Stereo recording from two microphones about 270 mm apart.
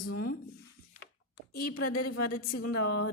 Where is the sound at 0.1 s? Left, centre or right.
Left.